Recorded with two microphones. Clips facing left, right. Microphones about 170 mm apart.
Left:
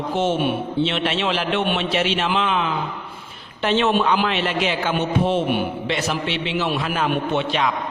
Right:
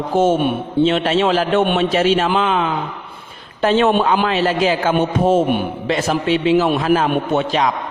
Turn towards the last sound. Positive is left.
turn(degrees=-40)  # may be behind; listen again after turning